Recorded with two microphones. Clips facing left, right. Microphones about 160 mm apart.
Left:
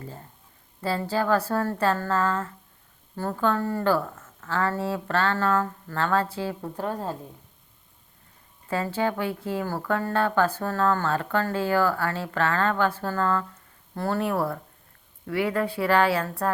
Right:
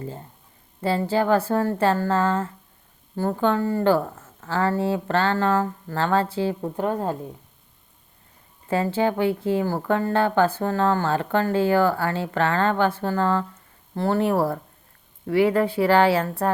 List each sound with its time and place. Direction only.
0.0 s speech: 30° right (ahead or behind)
3.6 s speech: 15° right (ahead or behind)
3.8 s speech: 30° right (ahead or behind)
8.6 s speech: 30° right (ahead or behind)